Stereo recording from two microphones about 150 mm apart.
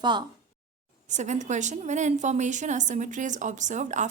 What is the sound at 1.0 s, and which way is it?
A woman's voice, 50° right (ahead or behind).